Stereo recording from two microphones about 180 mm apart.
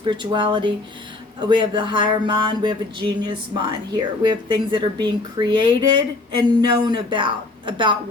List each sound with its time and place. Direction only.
0.0 s speech: 25° right (ahead or behind)